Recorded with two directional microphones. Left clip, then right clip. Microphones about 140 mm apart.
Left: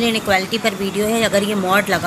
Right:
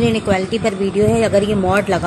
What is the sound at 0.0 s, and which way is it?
Speech, 40° right (ahead or behind).